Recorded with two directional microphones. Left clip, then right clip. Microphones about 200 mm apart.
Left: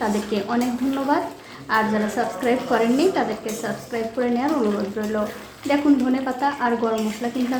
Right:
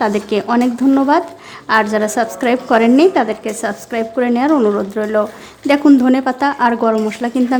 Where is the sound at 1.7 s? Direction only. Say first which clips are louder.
Right 7 dB; 50° right (ahead or behind).